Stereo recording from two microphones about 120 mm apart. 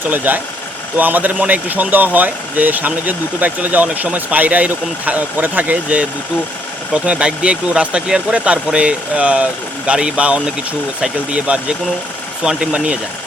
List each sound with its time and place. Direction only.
0.3 s speech: 15° right (ahead or behind)